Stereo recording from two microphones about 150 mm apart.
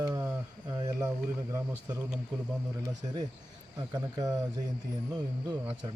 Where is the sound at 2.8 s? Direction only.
25° right (ahead or behind).